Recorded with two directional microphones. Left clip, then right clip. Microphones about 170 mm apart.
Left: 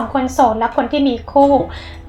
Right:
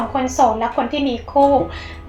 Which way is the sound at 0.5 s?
20° left (ahead or behind).